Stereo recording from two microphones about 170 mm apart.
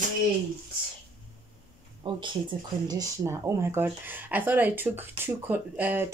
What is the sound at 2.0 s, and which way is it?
Speech, 30° right (ahead or behind).